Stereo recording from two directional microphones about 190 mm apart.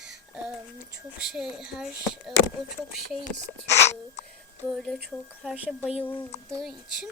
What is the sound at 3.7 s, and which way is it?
Speech, 35° left (ahead or behind).